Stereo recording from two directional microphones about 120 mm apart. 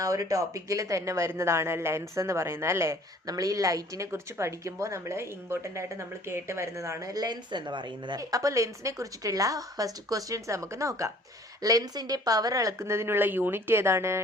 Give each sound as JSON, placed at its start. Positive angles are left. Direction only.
{"t": 0.0, "sound": "speech", "side_deg": -30}